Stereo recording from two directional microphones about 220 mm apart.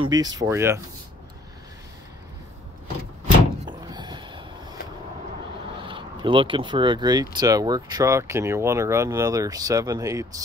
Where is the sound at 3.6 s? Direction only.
20° right (ahead or behind).